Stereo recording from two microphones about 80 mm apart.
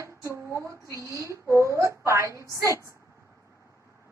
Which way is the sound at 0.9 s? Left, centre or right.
Right.